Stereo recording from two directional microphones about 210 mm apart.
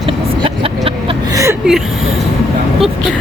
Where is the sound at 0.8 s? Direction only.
20° right (ahead or behind).